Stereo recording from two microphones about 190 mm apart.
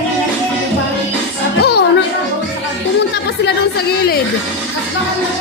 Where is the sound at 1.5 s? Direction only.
60° left (ahead or behind).